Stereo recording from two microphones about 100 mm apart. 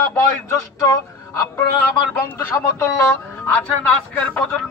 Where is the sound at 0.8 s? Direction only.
35° left (ahead or behind).